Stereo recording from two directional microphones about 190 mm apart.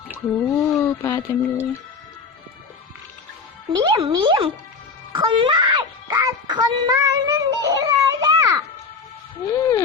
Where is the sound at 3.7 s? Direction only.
20° right (ahead or behind).